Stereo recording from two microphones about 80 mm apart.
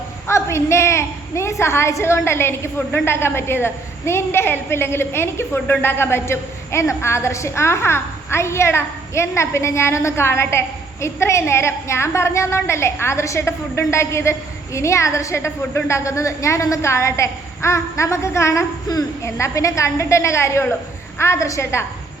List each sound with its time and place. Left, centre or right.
0.3 s a woman's voice: left